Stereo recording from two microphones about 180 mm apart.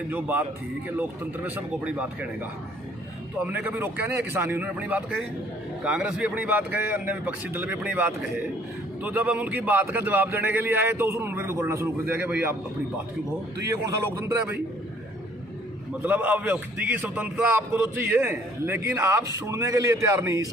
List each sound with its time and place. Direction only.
0.1 s a man's voice: 10° right (ahead or behind)
3.4 s a man's voice: 10° right (ahead or behind)
13.7 s a man's voice: 15° right (ahead or behind)
16.0 s a man's voice: 10° right (ahead or behind)